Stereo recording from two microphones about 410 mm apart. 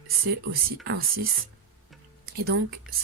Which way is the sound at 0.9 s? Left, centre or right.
Right.